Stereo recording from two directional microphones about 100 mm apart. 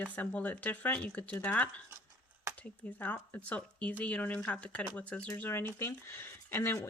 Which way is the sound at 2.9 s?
20° left (ahead or behind).